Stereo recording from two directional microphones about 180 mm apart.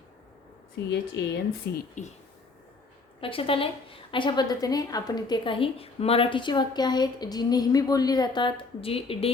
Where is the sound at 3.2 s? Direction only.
30° left (ahead or behind).